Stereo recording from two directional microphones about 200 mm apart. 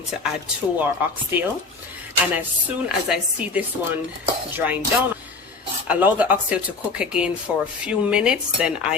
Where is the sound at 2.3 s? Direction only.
5° right (ahead or behind).